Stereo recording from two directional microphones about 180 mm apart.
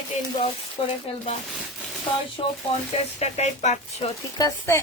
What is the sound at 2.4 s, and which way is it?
Speech, 30° left (ahead or behind).